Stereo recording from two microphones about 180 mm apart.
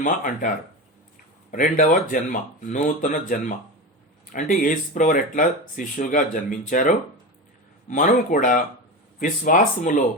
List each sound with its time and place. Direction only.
0.0 s speech: 50° left (ahead or behind)